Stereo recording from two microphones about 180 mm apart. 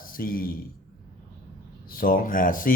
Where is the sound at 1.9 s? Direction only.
55° left (ahead or behind).